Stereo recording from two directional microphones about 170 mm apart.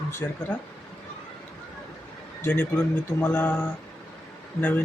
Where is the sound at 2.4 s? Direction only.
10° left (ahead or behind).